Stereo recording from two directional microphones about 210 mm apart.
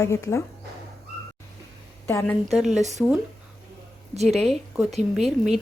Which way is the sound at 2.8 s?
35° right (ahead or behind).